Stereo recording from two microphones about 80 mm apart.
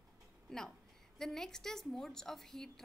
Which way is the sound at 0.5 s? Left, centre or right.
Centre.